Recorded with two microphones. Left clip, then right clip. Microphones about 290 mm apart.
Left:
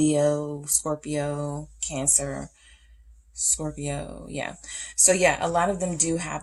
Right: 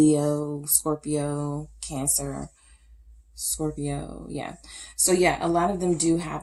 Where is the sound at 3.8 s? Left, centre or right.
Left.